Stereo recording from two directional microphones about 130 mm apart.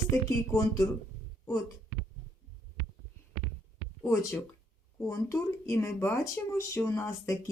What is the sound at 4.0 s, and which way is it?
Speech, 20° left (ahead or behind).